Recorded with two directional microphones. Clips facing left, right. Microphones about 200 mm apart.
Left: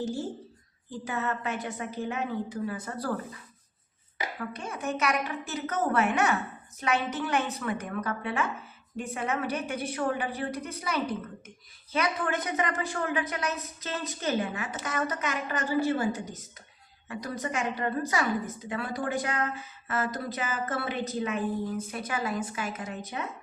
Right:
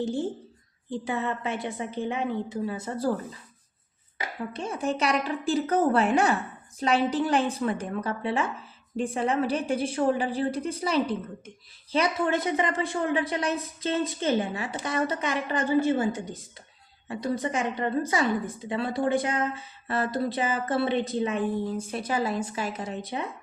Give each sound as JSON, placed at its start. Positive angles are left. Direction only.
{"t": 0.9, "sound": "a woman's voice", "side_deg": -25}
{"t": 4.4, "sound": "a woman's voice", "side_deg": -30}
{"t": 17.1, "sound": "a woman's voice", "side_deg": -25}